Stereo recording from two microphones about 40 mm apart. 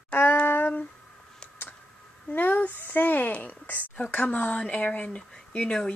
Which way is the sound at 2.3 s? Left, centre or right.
Left.